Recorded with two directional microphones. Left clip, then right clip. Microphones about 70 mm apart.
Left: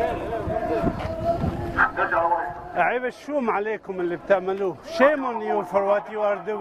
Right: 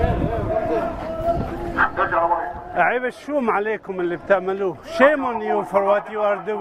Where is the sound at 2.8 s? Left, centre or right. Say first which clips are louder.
Right 3 dB; centre.